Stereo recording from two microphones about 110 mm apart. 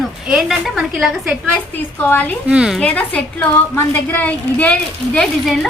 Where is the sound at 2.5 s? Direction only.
5° right (ahead or behind).